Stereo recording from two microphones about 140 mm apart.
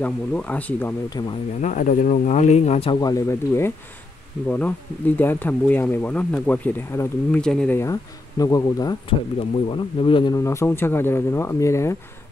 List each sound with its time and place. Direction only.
0.0 s speech: 10° left (ahead or behind)
1.2 s speech: 35° left (ahead or behind)
1.6 s speech: 65° left (ahead or behind); by 3.0 s 45° left (ahead or behind)
3.0 s speech: 25° left (ahead or behind)
7.4 s speech: 5° left (ahead or behind)
7.7 s speech: 25° left (ahead or behind)
9.7 s speech: 35° left (ahead or behind)
10.3 s speech: 20° left (ahead or behind)